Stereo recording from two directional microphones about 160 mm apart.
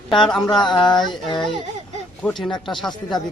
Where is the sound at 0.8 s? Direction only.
30° left (ahead or behind).